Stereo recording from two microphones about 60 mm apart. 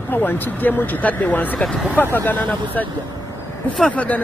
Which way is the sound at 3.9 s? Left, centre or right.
Left.